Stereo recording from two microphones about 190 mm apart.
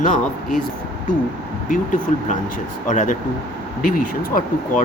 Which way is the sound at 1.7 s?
45° left (ahead or behind).